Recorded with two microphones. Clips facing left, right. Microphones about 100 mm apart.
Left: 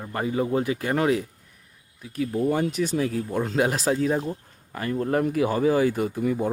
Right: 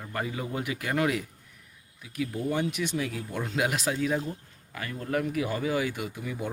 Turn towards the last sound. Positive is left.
turn(degrees=40)  # may be behind; listen again after turning